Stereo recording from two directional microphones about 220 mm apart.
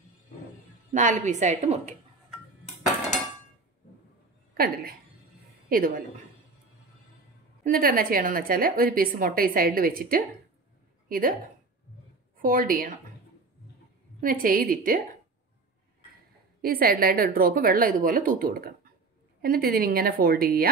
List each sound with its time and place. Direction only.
0.9 s a woman's voice: 35° right (ahead or behind)
4.6 s a sound: 40° right (ahead or behind)
5.7 s a woman's voice: 40° right (ahead or behind)
7.6 s a woman's voice: 40° right (ahead or behind)
12.4 s a woman's voice: 40° right (ahead or behind)
14.2 s a woman's voice: 40° right (ahead or behind)
16.6 s a woman's voice: 40° right (ahead or behind)